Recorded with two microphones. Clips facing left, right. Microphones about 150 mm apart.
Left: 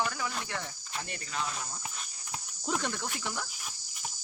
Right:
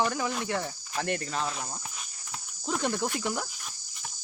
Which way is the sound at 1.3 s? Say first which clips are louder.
Right 4 dB; 35° right (ahead or behind).